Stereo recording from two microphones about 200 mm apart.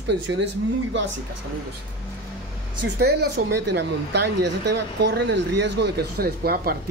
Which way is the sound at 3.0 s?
55° right (ahead or behind).